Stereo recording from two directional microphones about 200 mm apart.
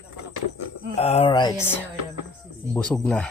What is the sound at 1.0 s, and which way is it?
Speech, 30° left (ahead or behind).